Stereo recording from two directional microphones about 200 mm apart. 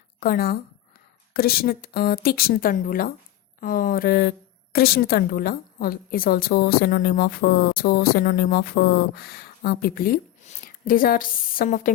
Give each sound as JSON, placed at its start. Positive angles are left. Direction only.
{"t": 0.2, "sound": "a woman's voice", "side_deg": 50}